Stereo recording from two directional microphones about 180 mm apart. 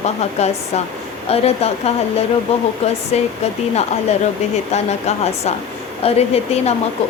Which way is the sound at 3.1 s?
35° left (ahead or behind).